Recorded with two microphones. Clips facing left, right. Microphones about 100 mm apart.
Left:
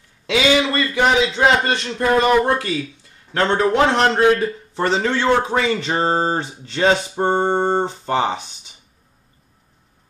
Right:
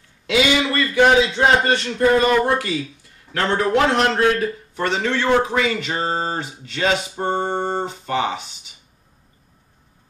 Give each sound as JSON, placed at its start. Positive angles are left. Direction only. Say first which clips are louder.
{"t": 0.3, "sound": "a man's voice", "louder": "left 1 dB", "side_deg": 25}